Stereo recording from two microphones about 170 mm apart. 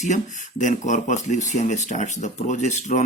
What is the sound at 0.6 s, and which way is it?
Speech, 50° left (ahead or behind).